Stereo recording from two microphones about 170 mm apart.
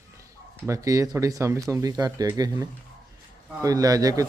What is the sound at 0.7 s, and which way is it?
A man's voice, 20° right (ahead or behind).